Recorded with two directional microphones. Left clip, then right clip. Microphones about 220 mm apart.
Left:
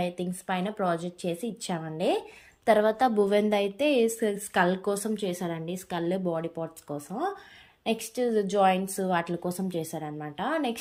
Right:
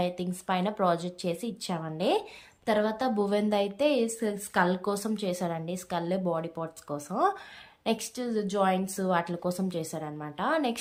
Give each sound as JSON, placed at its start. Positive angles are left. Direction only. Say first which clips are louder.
{"t": 0.0, "sound": "a woman's voice", "louder": "even", "side_deg": 0}
{"t": 2.6, "sound": "a woman's voice", "louder": "left 5 dB", "side_deg": 15}
{"t": 3.2, "sound": "a woman's voice", "louder": "left 3 dB", "side_deg": 5}